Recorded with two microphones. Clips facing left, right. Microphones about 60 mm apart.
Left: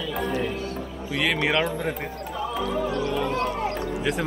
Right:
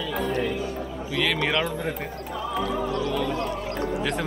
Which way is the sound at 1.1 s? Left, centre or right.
Centre.